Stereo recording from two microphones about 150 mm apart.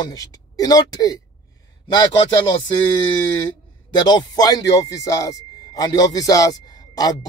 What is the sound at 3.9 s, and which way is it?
Speech, 30° left (ahead or behind).